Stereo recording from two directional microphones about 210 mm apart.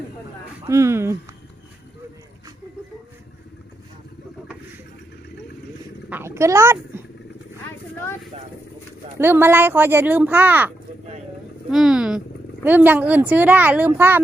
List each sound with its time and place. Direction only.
0.7 s speech: 15° right (ahead or behind)
6.1 s speech: 10° right (ahead or behind)
9.1 s speech: 10° right (ahead or behind)
11.7 s a sound: 5° right (ahead or behind)
12.6 s speech: 10° right (ahead or behind)